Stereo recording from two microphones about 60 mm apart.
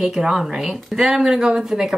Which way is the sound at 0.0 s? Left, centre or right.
Centre.